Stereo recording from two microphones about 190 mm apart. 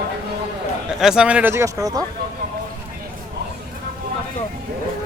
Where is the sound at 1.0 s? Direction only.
5° right (ahead or behind).